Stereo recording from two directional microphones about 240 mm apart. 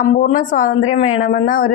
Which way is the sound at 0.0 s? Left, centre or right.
Left.